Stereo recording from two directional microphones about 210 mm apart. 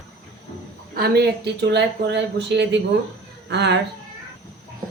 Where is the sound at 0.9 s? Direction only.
50° right (ahead or behind).